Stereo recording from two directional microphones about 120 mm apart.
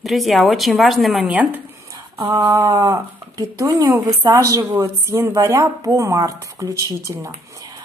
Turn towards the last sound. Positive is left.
turn(degrees=-25)  # may be behind; listen again after turning